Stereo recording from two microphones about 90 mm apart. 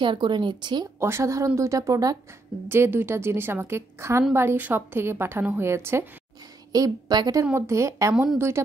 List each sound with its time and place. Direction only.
0.0 s speech: 65° right (ahead or behind)
0.9 s speech: 30° right (ahead or behind)
2.7 s a woman's voice: 25° right (ahead or behind)
6.7 s a woman's voice: 45° right (ahead or behind)
7.5 s a woman's voice: 30° right (ahead or behind)